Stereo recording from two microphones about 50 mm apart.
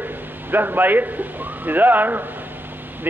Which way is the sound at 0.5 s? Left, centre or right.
Right.